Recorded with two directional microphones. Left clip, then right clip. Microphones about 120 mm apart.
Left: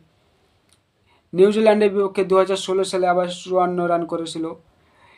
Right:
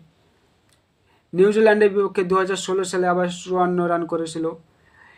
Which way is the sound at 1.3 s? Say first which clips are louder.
Even; 35° left (ahead or behind).